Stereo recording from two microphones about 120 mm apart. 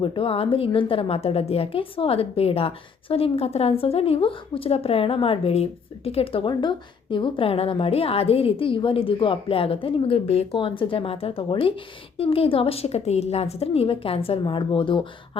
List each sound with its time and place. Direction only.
0.0 s a woman's voice: 45° left (ahead or behind)
14.4 s a woman's voice: 40° left (ahead or behind)